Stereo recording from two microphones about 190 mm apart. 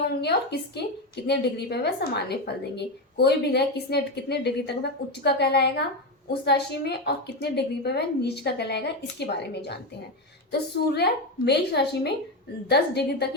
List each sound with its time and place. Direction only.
0.2 s a woman's voice: 60° left (ahead or behind)
10.9 s a woman's voice: 60° left (ahead or behind)